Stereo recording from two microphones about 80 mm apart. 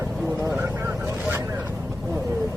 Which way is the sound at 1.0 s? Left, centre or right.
Right.